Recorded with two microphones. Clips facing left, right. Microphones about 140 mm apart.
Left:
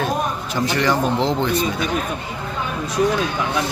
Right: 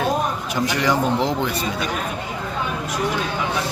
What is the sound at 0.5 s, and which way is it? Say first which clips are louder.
Speech: left 1 dB; 15° right (ahead or behind).